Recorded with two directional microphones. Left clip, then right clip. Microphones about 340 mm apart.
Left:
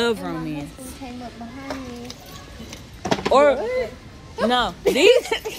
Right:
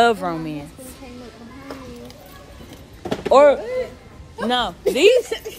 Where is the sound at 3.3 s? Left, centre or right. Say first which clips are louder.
Right 4 dB; centre.